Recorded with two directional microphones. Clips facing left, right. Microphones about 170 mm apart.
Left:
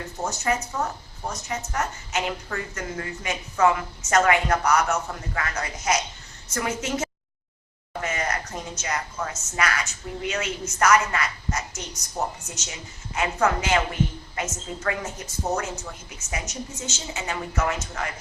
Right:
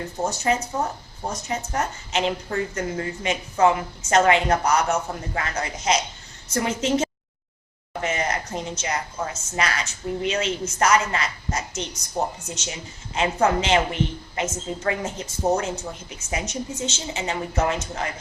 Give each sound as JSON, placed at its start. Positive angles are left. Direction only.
{"t": 0.0, "sound": "a woman's voice", "side_deg": -30}